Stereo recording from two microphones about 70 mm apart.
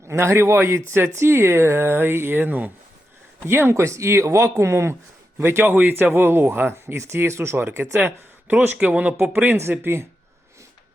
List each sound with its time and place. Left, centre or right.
0.1 s speech: right
3.4 s speech: right